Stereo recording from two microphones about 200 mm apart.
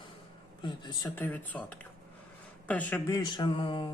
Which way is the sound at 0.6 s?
20° left (ahead or behind).